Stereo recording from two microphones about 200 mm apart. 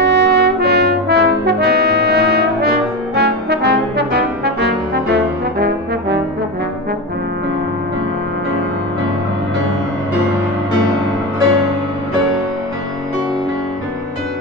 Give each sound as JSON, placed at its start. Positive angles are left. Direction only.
{"t": 0.0, "sound": "trumpet", "side_deg": -55}
{"t": 3.2, "sound": "brass instrument", "side_deg": -55}